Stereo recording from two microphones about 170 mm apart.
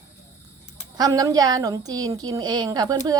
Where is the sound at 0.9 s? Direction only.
20° right (ahead or behind).